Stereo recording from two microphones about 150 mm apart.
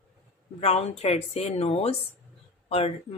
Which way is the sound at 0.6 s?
45° left (ahead or behind).